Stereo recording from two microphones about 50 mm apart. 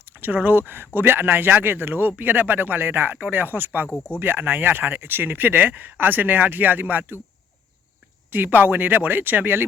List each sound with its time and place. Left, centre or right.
0.0 s speech: right
8.3 s speech: right